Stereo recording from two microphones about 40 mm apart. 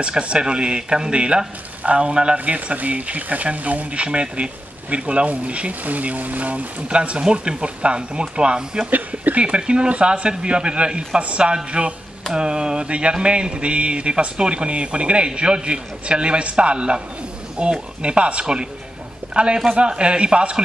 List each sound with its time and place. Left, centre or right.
0.0 s speech: right
2.3 s speech: right
6.9 s speech: right
8.9 s speech: right
9.4 s speech: right